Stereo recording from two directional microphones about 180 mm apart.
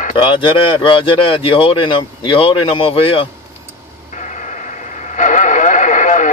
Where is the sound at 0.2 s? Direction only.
30° left (ahead or behind).